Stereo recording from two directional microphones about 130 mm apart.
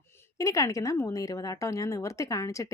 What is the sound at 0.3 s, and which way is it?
Speech, 25° left (ahead or behind).